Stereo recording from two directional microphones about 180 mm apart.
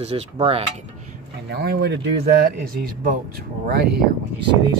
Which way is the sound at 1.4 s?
65° right (ahead or behind).